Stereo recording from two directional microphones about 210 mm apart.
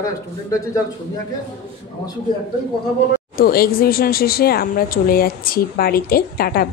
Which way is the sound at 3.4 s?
45° left (ahead or behind).